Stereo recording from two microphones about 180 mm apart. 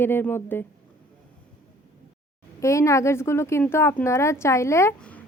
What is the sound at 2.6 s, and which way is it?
Speech, 15° left (ahead or behind).